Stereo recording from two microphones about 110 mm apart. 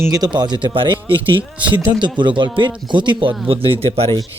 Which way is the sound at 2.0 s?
45° right (ahead or behind).